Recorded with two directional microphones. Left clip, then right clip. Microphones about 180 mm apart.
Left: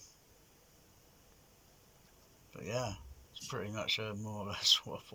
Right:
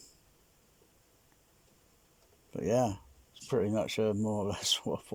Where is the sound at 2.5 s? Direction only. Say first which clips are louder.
Right 10 dB; 45° right (ahead or behind).